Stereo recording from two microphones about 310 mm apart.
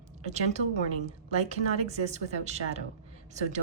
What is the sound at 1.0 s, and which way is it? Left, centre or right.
Speech, centre.